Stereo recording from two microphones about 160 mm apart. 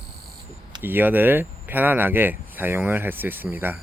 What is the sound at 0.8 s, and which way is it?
Speech, 10° right (ahead or behind).